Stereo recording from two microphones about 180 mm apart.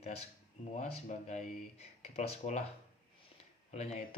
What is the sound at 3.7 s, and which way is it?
Speech, 40° left (ahead or behind).